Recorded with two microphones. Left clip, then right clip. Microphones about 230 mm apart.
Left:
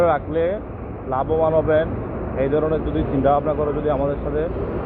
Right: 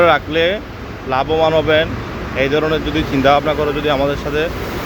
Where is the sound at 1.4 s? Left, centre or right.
Right.